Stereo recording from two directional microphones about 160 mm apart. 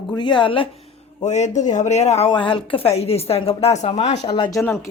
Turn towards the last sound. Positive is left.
turn(degrees=15)  # may be behind; listen again after turning